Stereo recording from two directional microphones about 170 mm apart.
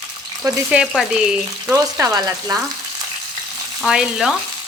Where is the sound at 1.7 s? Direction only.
20° right (ahead or behind).